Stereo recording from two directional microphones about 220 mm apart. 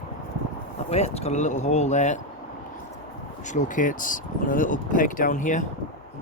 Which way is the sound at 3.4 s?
35° left (ahead or behind).